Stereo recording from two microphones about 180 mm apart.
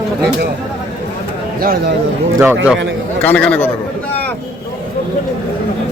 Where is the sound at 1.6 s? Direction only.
55° right (ahead or behind).